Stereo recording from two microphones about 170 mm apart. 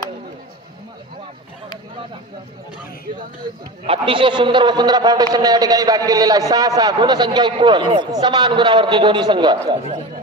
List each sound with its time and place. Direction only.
3.8 s a man's voice: 30° right (ahead or behind)